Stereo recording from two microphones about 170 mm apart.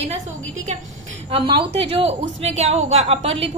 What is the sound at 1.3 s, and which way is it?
A woman's voice, 30° right (ahead or behind).